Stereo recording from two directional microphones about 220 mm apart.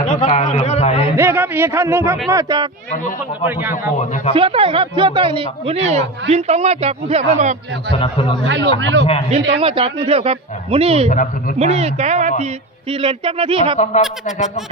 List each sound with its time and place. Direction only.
0.0 s a man's voice: 30° left (ahead or behind)
1.1 s a man's voice: 10° right (ahead or behind)
2.9 s speech: 35° left (ahead or behind)
3.4 s a man's voice: 10° right (ahead or behind)
3.9 s speech: 30° left (ahead or behind)
4.4 s a woman's voice: 25° right (ahead or behind)
7.9 s speech: 25° left (ahead or behind)
8.4 s a man's voice: 55° right (ahead or behind)
9.6 s a woman's voice: 25° right (ahead or behind)
11.1 s speech: 35° left (ahead or behind)
11.6 s a woman's voice: 30° right (ahead or behind)
14.3 s speech: 30° left (ahead or behind)